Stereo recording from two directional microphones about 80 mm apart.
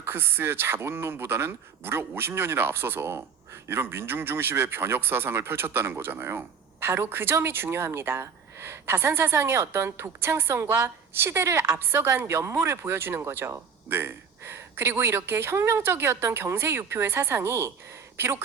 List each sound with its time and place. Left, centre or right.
0.0 s speech: right